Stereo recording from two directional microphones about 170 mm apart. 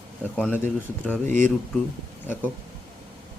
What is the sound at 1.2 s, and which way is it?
Speech, 50° right (ahead or behind).